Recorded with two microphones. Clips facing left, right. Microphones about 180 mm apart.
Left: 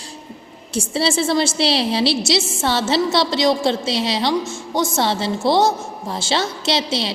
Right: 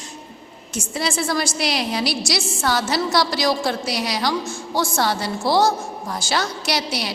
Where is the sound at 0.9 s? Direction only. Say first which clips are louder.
Left 4 dB; 30° left (ahead or behind).